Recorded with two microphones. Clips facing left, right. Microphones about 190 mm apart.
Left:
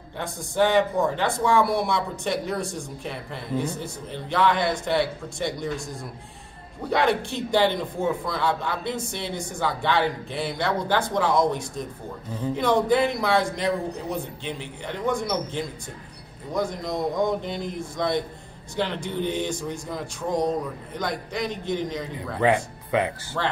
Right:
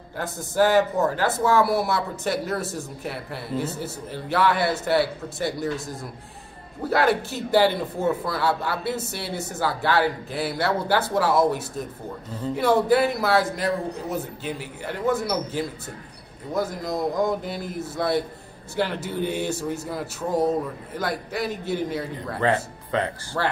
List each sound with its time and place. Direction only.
0.2 s speech: 5° right (ahead or behind)
6.8 s speech: 5° right (ahead or behind)
22.4 s speech: 10° left (ahead or behind)
23.3 s speech: 5° right (ahead or behind)